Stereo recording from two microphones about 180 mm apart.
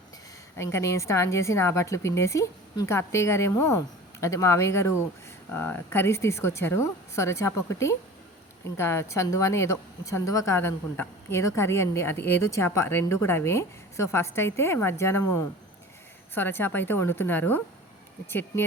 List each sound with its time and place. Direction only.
0.5 s a woman's voice: 15° left (ahead or behind)
16.3 s a woman's voice: 10° left (ahead or behind)